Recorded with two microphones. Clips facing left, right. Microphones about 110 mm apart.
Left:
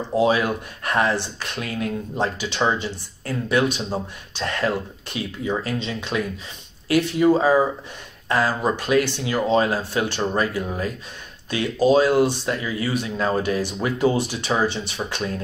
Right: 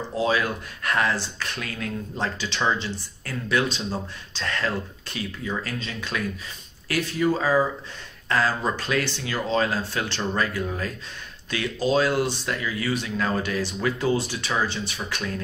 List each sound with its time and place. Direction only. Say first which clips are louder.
0.1 s speech: left 5 dB; 20° left (ahead or behind)